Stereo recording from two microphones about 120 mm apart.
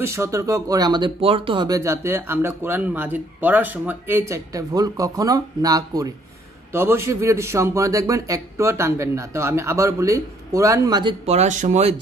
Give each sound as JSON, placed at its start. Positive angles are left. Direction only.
{"t": 0.0, "sound": "speech", "side_deg": -25}
{"t": 1.7, "sound": "a man's voice", "side_deg": -25}
{"t": 6.7, "sound": "a man's voice", "side_deg": -20}
{"t": 11.2, "sound": "speech", "side_deg": -70}